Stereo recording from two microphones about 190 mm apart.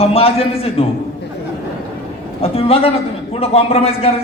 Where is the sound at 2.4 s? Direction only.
30° left (ahead or behind).